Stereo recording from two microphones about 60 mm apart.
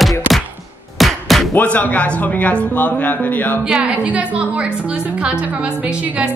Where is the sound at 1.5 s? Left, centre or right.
Left.